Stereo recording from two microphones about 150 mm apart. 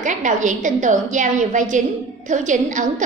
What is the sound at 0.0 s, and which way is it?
A woman's voice, 55° right (ahead or behind).